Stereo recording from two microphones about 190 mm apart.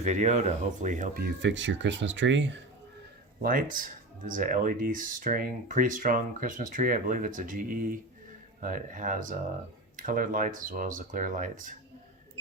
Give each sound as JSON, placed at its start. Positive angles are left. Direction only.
{"t": 0.0, "sound": "speech", "side_deg": -40}
{"t": 1.4, "sound": "speech", "side_deg": -75}
{"t": 3.4, "sound": "speech", "side_deg": -45}